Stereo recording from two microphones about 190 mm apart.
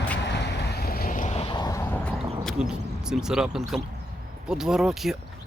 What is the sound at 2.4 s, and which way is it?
Speech, centre (ahead or behind).